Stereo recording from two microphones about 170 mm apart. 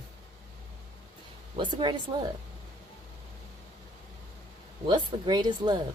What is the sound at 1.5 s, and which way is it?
Speech, 25° right (ahead or behind).